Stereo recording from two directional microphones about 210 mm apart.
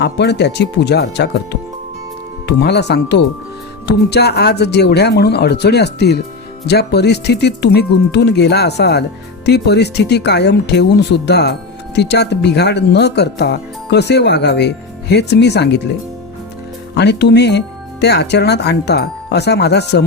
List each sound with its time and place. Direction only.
0.0 s speech: 55° left (ahead or behind)
2.5 s speech: 50° left (ahead or behind)
16.9 s speech: 55° left (ahead or behind)